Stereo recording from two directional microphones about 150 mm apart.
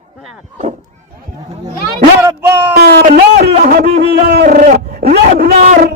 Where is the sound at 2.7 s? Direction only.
90° right.